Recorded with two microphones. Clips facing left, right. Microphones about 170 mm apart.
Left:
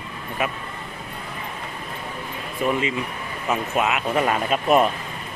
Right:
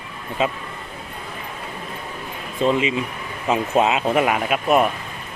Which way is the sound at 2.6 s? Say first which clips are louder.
Right 4 dB; 20° right (ahead or behind).